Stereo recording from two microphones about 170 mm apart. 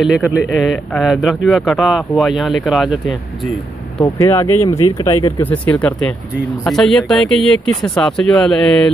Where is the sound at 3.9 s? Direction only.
25° left (ahead or behind).